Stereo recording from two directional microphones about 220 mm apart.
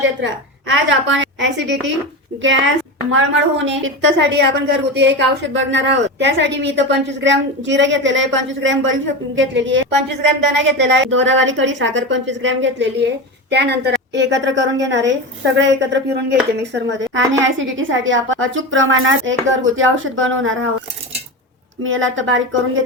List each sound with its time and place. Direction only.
0.0 s a woman's voice: 60° right (ahead or behind)
21.8 s a woman's voice: 60° right (ahead or behind)